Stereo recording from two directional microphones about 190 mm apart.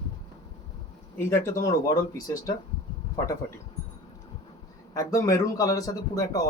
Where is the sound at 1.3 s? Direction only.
15° left (ahead or behind).